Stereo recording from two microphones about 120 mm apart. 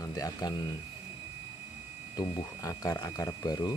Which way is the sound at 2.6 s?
25° left (ahead or behind).